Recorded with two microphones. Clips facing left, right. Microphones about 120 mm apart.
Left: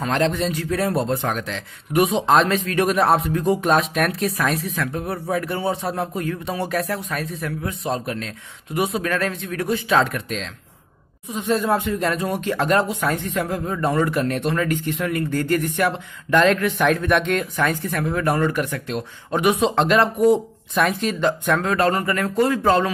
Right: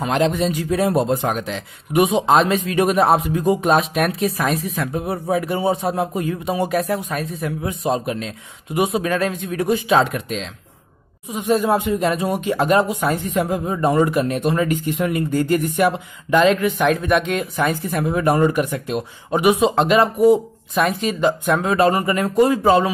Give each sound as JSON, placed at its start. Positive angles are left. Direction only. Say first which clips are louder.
{"t": 0.0, "sound": "speech", "louder": "right 2 dB", "side_deg": -10}
{"t": 4.9, "sound": "speech", "louder": "right 5 dB", "side_deg": -15}
{"t": 7.2, "sound": "speech", "louder": "right 2 dB", "side_deg": 0}
{"t": 7.4, "sound": "a man's voice", "louder": "right 6 dB", "side_deg": -25}
{"t": 8.7, "sound": "speech", "louder": "right 3 dB", "side_deg": -5}
{"t": 9.0, "sound": "a man's voice", "louder": "right 3 dB", "side_deg": -15}
{"t": 11.2, "sound": "speech", "louder": "right 3 dB", "side_deg": -10}